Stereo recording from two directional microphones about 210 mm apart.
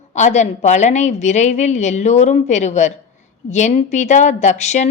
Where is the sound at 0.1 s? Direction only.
35° left (ahead or behind).